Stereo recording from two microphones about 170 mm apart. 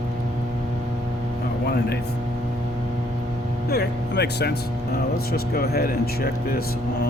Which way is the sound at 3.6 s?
70° left (ahead or behind).